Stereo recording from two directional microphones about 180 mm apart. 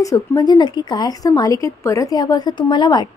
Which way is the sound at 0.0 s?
20° left (ahead or behind).